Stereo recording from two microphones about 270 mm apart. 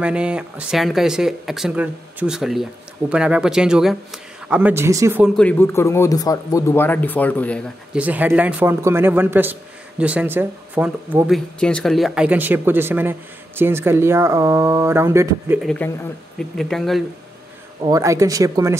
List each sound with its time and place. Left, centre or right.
0.0 s speech: centre
17.8 s speech: centre